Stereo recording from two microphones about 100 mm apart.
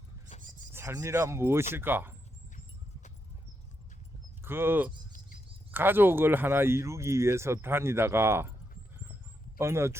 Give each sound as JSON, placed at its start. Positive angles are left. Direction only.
{"t": 0.7, "sound": "a sound", "side_deg": -25}
{"t": 1.0, "sound": "speech", "side_deg": -25}
{"t": 4.4, "sound": "speech", "side_deg": -20}
{"t": 9.6, "sound": "speech", "side_deg": -25}